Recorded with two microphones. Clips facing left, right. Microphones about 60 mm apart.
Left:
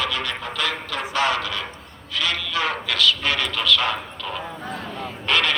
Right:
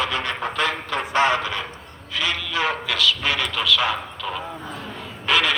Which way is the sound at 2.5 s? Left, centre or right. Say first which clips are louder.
Right 1 dB; centre.